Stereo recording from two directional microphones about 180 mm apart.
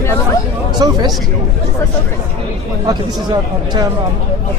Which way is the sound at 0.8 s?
20° right (ahead or behind).